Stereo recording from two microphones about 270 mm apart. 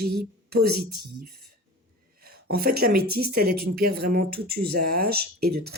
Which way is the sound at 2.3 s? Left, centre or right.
Right.